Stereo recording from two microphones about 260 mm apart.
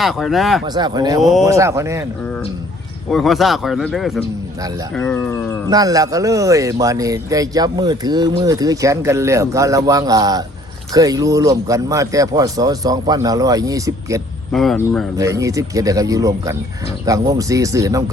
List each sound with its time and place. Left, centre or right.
0.0 s speech: centre
0.6 s a man's voice: centre
1.2 s speech: centre
1.5 s a man's voice: centre
3.1 s speech: centre
5.6 s a man's voice: centre
14.5 s speech: centre
15.2 s a man's voice: centre